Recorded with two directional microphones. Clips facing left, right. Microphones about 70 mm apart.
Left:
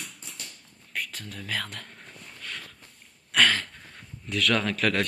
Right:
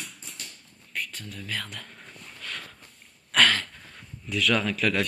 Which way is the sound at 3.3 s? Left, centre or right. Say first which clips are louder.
Right 1 dB; left.